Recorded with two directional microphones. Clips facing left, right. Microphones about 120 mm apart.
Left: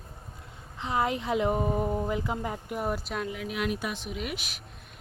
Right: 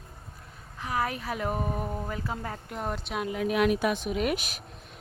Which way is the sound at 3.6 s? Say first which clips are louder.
Right 6 dB; 60° right (ahead or behind).